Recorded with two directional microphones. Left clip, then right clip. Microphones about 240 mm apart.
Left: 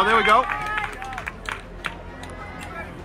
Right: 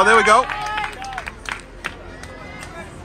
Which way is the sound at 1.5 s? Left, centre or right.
Right.